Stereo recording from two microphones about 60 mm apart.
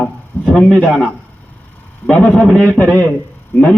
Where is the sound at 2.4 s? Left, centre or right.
Centre.